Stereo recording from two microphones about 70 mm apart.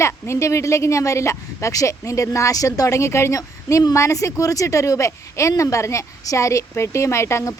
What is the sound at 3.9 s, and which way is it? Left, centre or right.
Speech, left.